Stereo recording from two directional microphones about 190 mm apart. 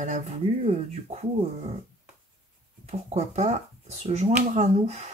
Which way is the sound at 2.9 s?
35° right (ahead or behind).